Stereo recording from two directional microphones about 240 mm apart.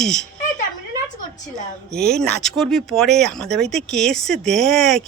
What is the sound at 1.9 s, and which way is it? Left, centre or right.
Speech, right.